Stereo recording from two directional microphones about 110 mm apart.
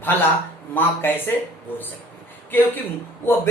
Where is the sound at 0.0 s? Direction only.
20° left (ahead or behind).